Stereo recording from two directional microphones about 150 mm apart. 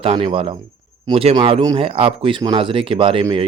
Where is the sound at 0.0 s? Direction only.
35° right (ahead or behind).